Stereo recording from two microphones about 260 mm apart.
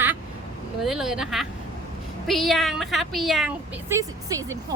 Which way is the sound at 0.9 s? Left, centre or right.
Centre.